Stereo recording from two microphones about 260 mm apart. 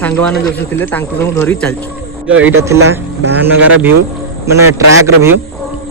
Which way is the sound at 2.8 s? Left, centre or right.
Right.